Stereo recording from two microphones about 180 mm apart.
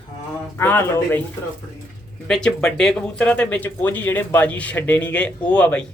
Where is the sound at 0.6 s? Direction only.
10° left (ahead or behind).